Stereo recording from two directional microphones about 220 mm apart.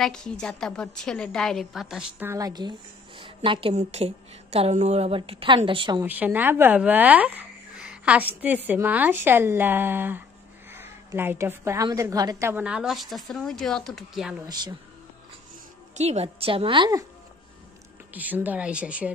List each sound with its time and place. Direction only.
0.0 s a woman's voice: 5° left (ahead or behind); by 6.0 s 20° right (ahead or behind)
6.0 s speech: 10° right (ahead or behind)
14.4 s a woman's voice: 20° right (ahead or behind)
16.0 s a woman's voice: 30° right (ahead or behind)
18.1 s speech: 10° right (ahead or behind)